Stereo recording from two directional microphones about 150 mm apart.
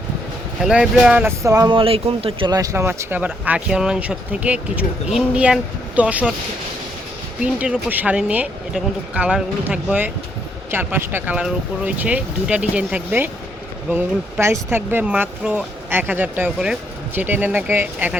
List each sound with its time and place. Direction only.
0.6 s speech: 5° right (ahead or behind)
1.4 s speech: 25° right (ahead or behind); by 2.5 s 40° right (ahead or behind)
2.5 s speech: 20° right (ahead or behind)
7.4 s speech: 10° right (ahead or behind)